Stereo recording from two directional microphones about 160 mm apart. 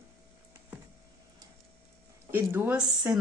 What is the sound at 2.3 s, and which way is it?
Speech, 10° right (ahead or behind).